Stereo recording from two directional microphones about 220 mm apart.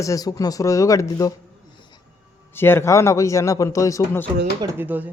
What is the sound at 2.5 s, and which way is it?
Speech, 10° left (ahead or behind).